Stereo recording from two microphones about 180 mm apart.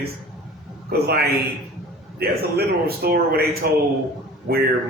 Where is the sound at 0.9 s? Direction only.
60° right (ahead or behind).